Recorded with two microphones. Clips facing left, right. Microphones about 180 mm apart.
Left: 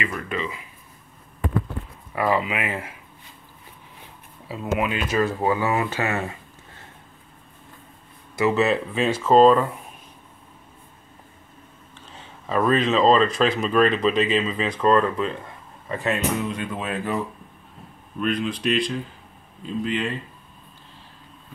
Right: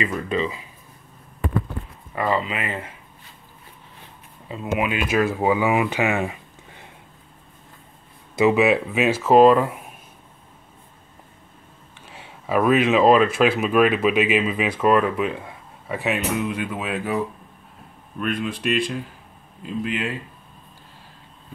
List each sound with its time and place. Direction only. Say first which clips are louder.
0.0 s speech: right 4 dB; 30° right (ahead or behind)
2.1 s speech: left 1 dB; 10° left (ahead or behind)
4.7 s speech: right 2 dB; 10° right (ahead or behind)
8.4 s speech: right 3 dB; 15° right (ahead or behind)
12.1 s speech: right 4 dB; 10° right (ahead or behind)
18.4 s speech: even; 5° right (ahead or behind)